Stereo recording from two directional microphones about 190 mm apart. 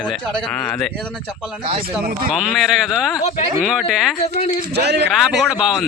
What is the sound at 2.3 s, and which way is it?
Speech, centre (ahead or behind).